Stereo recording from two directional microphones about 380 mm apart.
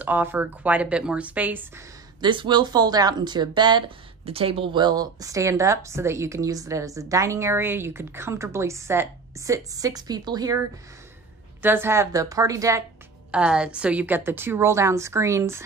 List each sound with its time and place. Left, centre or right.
0.0 s a woman's voice: centre
11.6 s a woman's voice: centre